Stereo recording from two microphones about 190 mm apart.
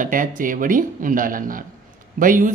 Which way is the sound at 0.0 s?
45° right (ahead or behind).